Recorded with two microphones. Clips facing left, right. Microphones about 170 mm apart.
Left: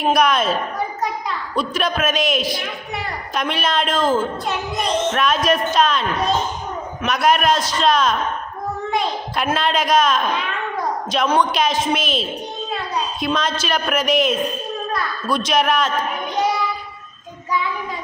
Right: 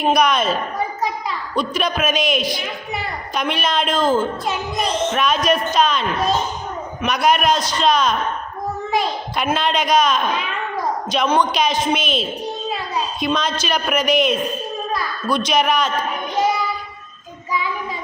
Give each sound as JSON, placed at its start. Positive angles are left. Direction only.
{"t": 0.0, "sound": "a woman's voice", "side_deg": 0}